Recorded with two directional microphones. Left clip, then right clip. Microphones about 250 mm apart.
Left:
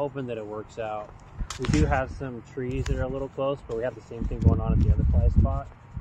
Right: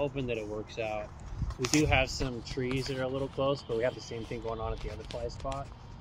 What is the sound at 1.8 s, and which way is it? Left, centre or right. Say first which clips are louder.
Speech: left 1 dB; centre.